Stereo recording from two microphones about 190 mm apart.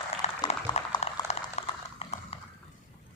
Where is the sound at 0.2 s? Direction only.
35° left (ahead or behind).